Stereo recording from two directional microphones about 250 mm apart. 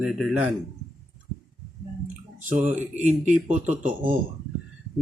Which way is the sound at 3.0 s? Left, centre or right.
Right.